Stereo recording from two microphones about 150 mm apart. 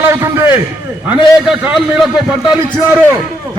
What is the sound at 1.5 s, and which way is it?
Speech, centre (ahead or behind).